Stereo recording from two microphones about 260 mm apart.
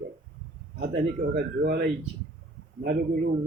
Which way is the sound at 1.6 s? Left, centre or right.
Right.